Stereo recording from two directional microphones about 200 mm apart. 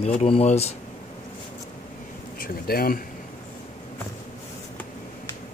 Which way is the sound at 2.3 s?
50° left (ahead or behind).